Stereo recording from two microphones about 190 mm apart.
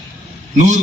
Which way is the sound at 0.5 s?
40° right (ahead or behind).